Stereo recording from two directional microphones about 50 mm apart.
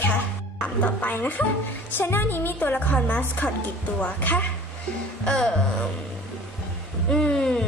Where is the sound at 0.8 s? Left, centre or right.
Left.